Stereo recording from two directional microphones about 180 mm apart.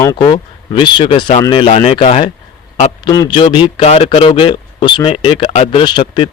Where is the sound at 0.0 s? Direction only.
20° left (ahead or behind).